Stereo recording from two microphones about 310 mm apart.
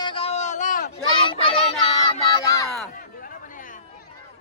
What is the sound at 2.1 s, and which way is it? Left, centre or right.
Child singing, centre.